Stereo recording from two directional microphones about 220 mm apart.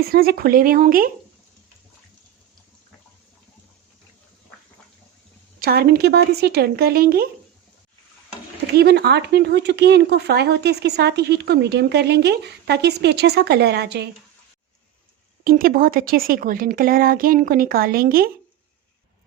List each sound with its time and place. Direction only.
0.0 s a woman's voice: 45° right (ahead or behind)
5.5 s speech: 45° right (ahead or behind)
8.6 s speech: 50° right (ahead or behind)
15.4 s a woman's voice: 40° right (ahead or behind)